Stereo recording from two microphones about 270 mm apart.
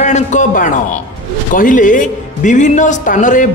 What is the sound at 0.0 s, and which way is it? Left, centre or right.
A man's voice, left.